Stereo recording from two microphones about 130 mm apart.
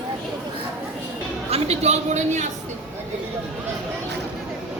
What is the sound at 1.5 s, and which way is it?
Speech, 55° right (ahead or behind).